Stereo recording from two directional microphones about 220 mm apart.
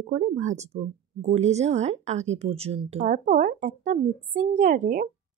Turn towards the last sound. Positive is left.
turn(degrees=-35)  # may be behind; listen again after turning